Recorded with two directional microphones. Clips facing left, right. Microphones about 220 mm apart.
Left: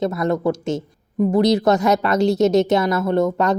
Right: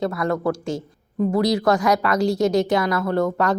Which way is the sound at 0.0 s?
20° left (ahead or behind).